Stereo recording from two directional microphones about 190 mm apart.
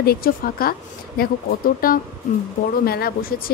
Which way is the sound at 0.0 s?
55° left (ahead or behind).